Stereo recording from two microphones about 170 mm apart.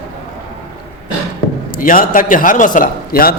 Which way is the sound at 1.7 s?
55° left (ahead or behind).